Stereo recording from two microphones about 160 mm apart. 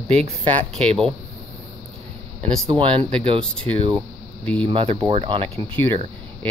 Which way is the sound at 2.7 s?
35° right (ahead or behind).